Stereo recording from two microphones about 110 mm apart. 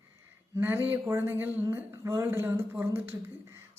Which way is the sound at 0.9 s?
20° right (ahead or behind).